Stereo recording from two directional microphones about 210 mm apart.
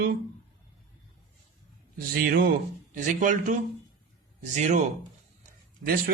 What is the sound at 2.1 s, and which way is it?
Speech, 45° right (ahead or behind).